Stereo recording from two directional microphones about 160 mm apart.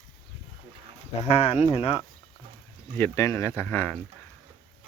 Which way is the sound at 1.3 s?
40° left (ahead or behind).